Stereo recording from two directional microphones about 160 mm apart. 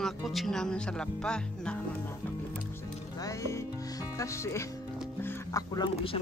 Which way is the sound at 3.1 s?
20° left (ahead or behind).